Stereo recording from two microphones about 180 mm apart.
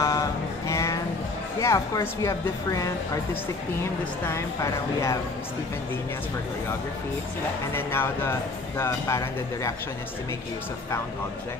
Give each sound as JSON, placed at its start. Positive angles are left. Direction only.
{"t": 0.0, "sound": "music", "side_deg": 20}
{"t": 1.6, "sound": "speech", "side_deg": 15}
{"t": 4.3, "sound": "speech", "side_deg": 15}
{"t": 7.7, "sound": "speech", "side_deg": 10}